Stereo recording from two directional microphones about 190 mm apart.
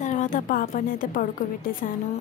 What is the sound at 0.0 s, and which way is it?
A woman's voice, 40° left (ahead or behind).